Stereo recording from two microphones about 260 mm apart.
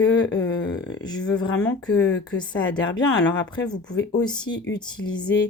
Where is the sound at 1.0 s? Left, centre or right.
Centre.